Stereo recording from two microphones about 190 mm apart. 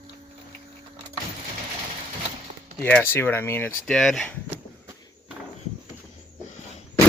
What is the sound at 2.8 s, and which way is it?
Speech, 10° left (ahead or behind).